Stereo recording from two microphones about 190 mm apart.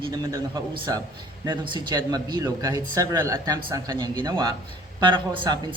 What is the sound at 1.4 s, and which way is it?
A man's voice, 25° right (ahead or behind).